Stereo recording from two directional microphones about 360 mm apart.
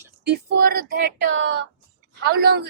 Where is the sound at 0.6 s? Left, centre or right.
Right.